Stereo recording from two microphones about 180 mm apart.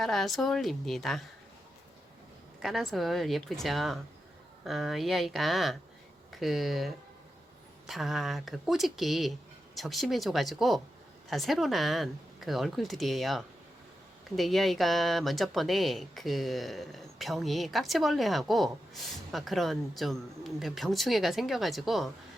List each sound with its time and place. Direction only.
0.0 s speech: centre (ahead or behind)
2.6 s speech: centre (ahead or behind)